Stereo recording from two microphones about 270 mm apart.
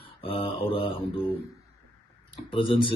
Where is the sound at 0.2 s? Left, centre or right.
Centre.